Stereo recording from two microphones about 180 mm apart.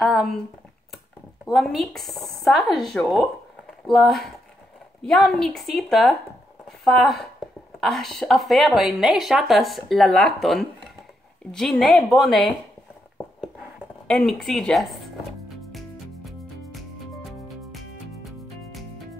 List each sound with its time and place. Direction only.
0.0 s a woman's voice: centre (ahead or behind)
14.0 s a woman's voice: centre (ahead or behind)
16.3 s music: centre (ahead or behind)